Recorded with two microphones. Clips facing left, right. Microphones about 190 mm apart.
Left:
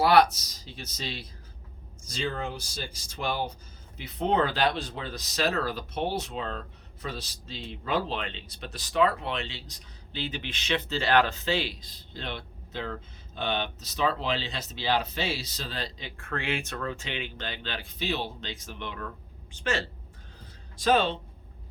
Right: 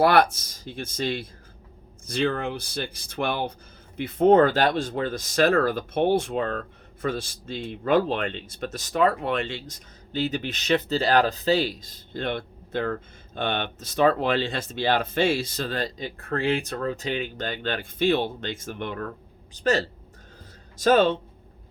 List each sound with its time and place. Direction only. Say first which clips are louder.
0.0 s speech: right 2 dB; 55° right (ahead or behind)
19.5 s speech: right 7 dB; 40° right (ahead or behind)